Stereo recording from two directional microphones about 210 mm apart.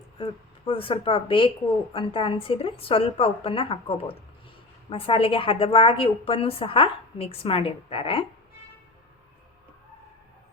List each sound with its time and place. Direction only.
0.2 s a woman's voice: 25° left (ahead or behind)